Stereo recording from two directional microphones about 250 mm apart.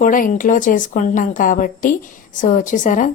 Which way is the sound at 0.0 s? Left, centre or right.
Left.